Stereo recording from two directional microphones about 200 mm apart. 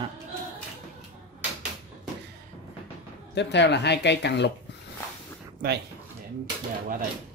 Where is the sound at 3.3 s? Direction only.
60° left (ahead or behind).